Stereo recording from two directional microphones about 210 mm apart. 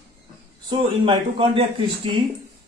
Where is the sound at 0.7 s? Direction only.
25° right (ahead or behind).